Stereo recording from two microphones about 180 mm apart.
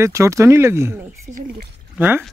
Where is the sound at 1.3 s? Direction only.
45° right (ahead or behind).